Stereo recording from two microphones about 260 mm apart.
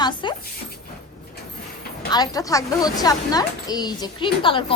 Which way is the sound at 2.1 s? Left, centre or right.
Centre.